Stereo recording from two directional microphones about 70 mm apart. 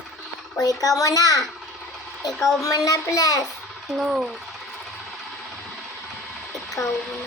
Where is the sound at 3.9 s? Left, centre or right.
Centre.